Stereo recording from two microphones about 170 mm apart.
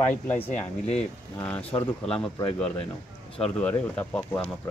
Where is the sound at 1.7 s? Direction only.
30° left (ahead or behind).